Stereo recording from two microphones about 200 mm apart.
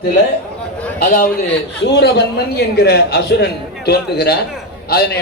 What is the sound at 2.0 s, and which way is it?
A man's voice, 55° left (ahead or behind).